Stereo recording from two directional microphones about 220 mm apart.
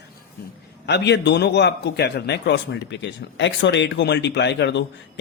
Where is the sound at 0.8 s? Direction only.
50° left (ahead or behind).